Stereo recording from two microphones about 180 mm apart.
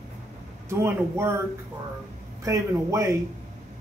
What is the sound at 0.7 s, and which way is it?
Speech, 15° right (ahead or behind).